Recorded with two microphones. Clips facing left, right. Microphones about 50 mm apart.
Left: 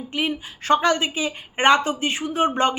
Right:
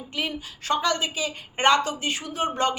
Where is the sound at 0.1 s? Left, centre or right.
Left.